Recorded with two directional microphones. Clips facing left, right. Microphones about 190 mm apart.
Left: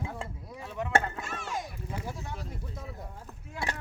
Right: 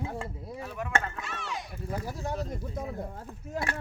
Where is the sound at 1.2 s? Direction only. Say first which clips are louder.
Left 1 dB; 45° left (ahead or behind).